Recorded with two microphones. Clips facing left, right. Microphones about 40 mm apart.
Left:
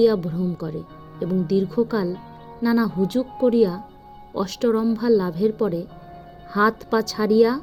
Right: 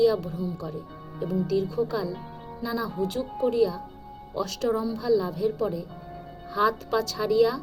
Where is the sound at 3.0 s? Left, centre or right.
Left.